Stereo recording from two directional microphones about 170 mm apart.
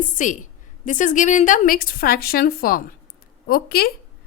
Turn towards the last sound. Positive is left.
turn(degrees=65)  # may be behind; listen again after turning